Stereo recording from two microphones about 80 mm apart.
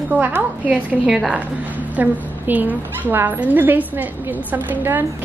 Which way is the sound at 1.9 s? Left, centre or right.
Right.